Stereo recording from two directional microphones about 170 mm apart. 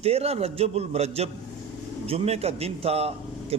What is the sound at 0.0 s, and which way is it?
Speech, 35° right (ahead or behind).